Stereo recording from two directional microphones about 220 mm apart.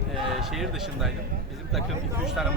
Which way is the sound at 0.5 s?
Centre (ahead or behind).